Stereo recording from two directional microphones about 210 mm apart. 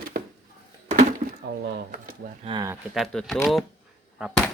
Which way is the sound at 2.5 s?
15° right (ahead or behind).